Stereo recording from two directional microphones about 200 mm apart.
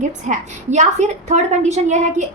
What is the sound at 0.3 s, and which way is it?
A woman's voice, 35° right (ahead or behind).